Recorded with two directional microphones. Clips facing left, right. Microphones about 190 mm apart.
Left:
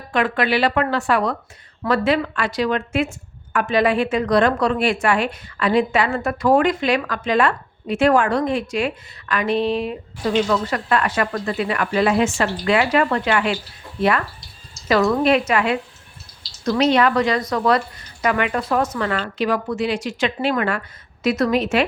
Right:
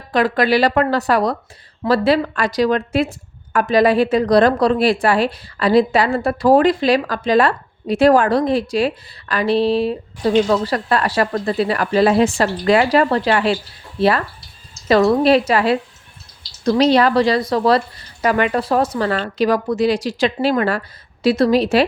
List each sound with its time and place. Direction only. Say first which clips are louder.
0.1 s a woman's voice: right 4 dB; 35° right (ahead or behind)